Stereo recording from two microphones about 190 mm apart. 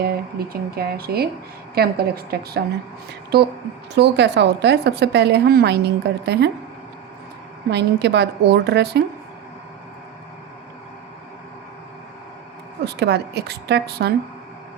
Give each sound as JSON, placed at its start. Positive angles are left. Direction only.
{"t": 0.0, "sound": "a woman's voice", "side_deg": -55}
{"t": 7.7, "sound": "a woman's voice", "side_deg": -60}
{"t": 12.8, "sound": "a woman's voice", "side_deg": -60}